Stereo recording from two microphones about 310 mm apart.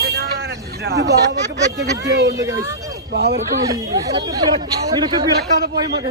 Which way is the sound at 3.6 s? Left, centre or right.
Centre.